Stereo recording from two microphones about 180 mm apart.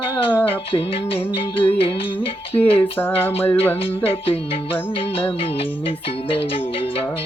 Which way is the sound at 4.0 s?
30° left (ahead or behind).